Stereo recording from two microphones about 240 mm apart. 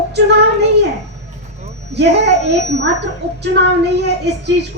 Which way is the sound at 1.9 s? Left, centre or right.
Right.